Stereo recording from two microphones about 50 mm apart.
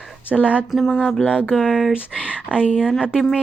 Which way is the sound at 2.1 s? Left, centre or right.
Right.